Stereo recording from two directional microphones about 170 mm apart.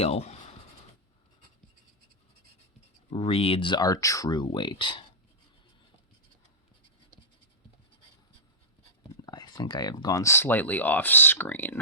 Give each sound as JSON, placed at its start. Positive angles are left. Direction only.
{"t": 0.0, "sound": "writing", "side_deg": 40}
{"t": 3.1, "sound": "speech", "side_deg": 30}
{"t": 9.2, "sound": "speech", "side_deg": 25}